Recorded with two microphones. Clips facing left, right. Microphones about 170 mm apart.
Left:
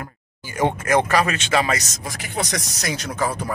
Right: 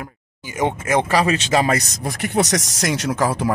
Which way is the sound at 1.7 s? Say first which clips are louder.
Right 4 dB; 60° right (ahead or behind).